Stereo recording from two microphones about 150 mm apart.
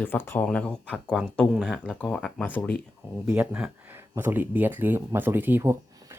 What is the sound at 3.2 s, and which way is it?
Speech, 15° right (ahead or behind).